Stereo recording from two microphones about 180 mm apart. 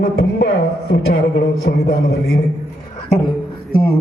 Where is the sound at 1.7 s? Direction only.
65° left (ahead or behind).